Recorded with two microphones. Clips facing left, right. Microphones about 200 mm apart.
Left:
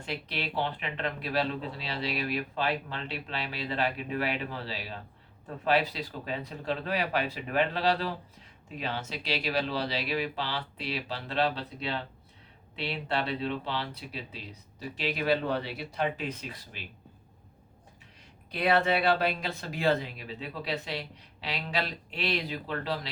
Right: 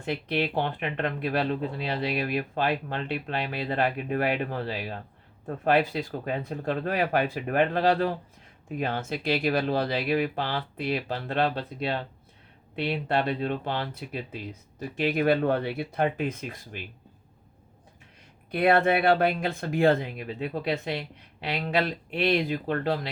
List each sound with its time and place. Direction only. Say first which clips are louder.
0.0 s speech: right 8 dB; 50° right (ahead or behind)
18.5 s speech: right 4 dB; 55° right (ahead or behind)